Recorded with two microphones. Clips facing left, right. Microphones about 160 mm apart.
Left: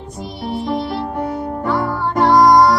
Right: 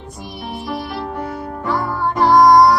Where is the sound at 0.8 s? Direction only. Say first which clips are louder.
Left 4 dB; 30° left (ahead or behind).